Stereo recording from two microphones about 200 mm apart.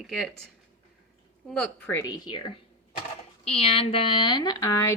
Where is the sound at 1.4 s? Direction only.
5° left (ahead or behind).